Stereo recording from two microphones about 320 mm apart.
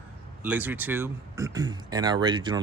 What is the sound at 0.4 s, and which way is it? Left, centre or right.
Speech, centre.